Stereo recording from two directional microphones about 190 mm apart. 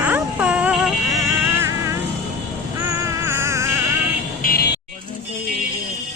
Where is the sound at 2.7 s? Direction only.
15° right (ahead or behind).